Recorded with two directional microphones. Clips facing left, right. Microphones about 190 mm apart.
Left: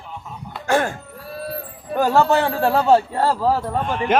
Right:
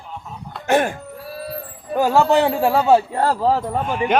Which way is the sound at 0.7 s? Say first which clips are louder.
Right 2 dB; 20° right (ahead or behind).